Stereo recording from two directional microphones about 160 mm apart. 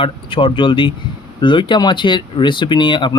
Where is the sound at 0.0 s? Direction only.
35° left (ahead or behind).